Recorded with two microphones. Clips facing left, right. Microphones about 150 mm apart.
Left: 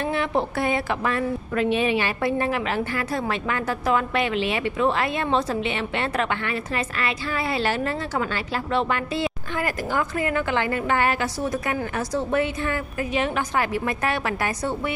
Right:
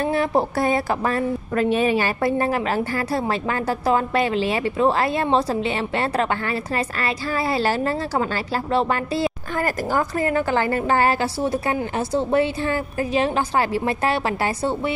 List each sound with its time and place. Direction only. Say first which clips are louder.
0.0 s a woman's voice: right 4 dB; 40° right (ahead or behind)